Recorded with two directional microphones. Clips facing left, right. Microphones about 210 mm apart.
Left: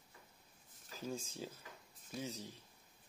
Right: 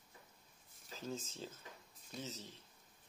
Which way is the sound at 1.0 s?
10° left (ahead or behind).